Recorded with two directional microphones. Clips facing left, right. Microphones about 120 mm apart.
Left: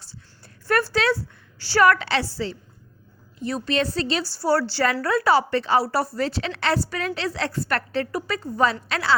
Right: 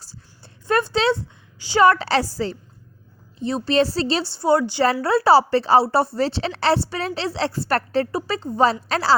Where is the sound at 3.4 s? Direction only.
30° right (ahead or behind).